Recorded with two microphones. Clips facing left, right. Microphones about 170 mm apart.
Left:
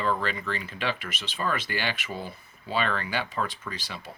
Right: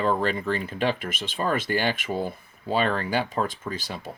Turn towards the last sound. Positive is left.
turn(degrees=-50)  # may be behind; listen again after turning